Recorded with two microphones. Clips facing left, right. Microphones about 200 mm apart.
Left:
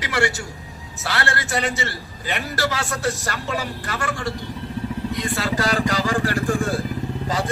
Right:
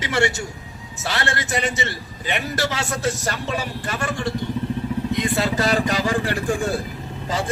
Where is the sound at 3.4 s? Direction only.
20° right (ahead or behind).